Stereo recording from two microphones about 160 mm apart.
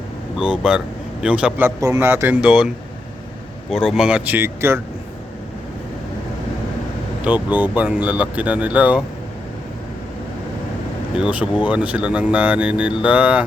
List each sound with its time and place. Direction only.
0.3 s speech: 5° right (ahead or behind)
3.8 s speech: 5° right (ahead or behind)
7.3 s speech: 10° right (ahead or behind)
11.2 s speech: 10° right (ahead or behind)